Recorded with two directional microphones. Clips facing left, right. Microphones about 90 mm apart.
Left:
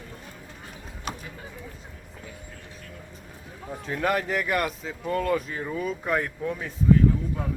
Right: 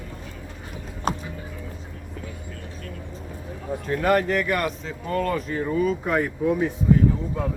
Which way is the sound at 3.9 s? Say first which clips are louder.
Right 5 dB; centre (ahead or behind).